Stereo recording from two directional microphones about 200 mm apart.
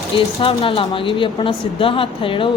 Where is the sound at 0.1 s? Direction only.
30° left (ahead or behind).